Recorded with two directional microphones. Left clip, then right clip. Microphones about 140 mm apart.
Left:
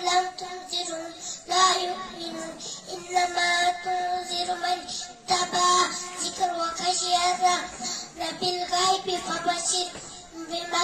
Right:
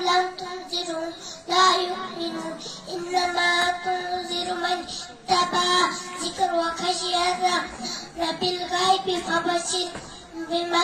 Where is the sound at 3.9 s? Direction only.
45° left (ahead or behind).